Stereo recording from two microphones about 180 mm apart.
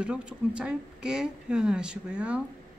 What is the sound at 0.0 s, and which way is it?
Speech, 5° right (ahead or behind).